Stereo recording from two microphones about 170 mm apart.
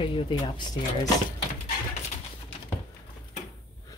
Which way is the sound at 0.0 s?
30° left (ahead or behind).